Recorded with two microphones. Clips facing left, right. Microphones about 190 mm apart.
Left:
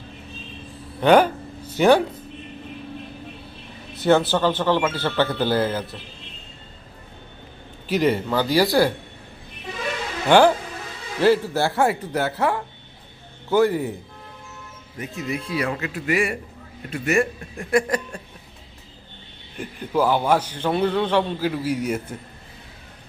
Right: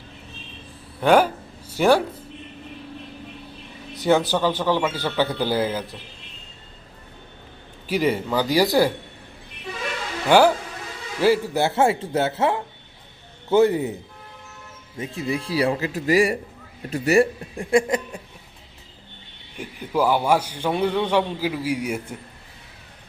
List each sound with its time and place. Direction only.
1.0 s speech: 5° right (ahead or behind)
3.9 s a man's voice: 15° right (ahead or behind)
7.9 s a man's voice: 10° right (ahead or behind)
10.2 s a man's voice: 10° right (ahead or behind)
14.9 s speech: 30° right (ahead or behind)
19.5 s a man's voice: 10° right (ahead or behind)